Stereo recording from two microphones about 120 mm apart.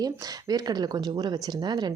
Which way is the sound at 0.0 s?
35° right (ahead or behind).